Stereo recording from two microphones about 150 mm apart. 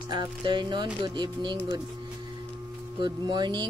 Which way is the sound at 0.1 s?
30° right (ahead or behind).